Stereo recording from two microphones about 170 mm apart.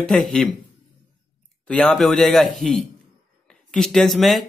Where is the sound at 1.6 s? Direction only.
5° left (ahead or behind).